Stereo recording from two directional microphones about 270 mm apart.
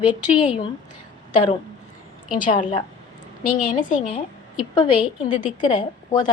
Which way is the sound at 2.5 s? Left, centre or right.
Centre.